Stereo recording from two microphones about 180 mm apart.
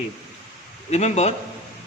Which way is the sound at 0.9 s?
40° left (ahead or behind).